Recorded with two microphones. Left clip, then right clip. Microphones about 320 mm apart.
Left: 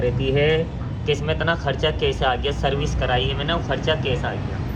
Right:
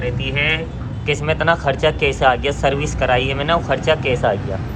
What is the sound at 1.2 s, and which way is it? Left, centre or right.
Speech, centre.